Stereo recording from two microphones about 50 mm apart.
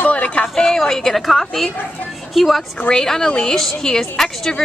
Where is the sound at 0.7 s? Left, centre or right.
Centre.